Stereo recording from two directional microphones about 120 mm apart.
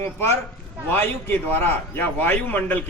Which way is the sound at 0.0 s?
20° left (ahead or behind).